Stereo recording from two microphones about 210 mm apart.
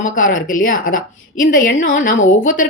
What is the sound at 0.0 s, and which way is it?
Speech, 40° left (ahead or behind).